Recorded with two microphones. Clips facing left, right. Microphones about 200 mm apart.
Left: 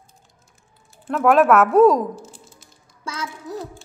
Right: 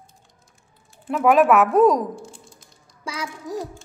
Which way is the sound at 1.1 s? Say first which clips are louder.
Left 1 dB; centre (ahead or behind).